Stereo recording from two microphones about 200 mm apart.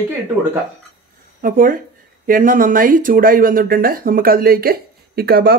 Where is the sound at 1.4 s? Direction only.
45° right (ahead or behind).